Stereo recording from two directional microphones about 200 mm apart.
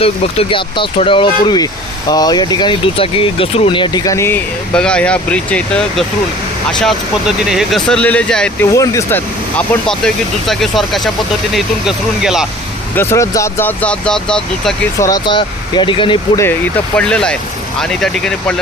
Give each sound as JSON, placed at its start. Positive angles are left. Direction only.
{"t": 0.0, "sound": "speech", "side_deg": 25}
{"t": 8.7, "sound": "speech", "side_deg": 15}
{"t": 13.0, "sound": "speech", "side_deg": 15}
{"t": 15.0, "sound": "speech", "side_deg": 20}
{"t": 17.0, "sound": "speech", "side_deg": 5}